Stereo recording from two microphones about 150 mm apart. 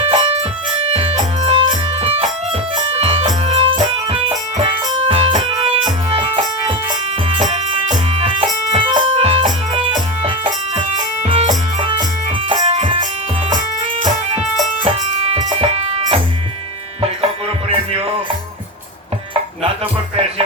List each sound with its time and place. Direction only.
0.0 s music: 45° right (ahead or behind)
7.4 s music: 50° right (ahead or behind)
12.6 s music: 45° right (ahead or behind)
15.5 s music: 40° right (ahead or behind)